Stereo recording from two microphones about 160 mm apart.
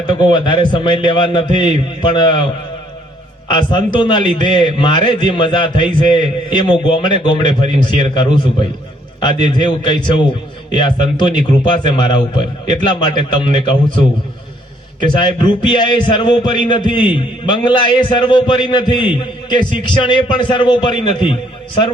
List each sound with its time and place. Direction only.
0.1 s a man's voice: 30° left (ahead or behind)
3.5 s a man's voice: 30° left (ahead or behind)
15.2 s a man's voice: 30° left (ahead or behind)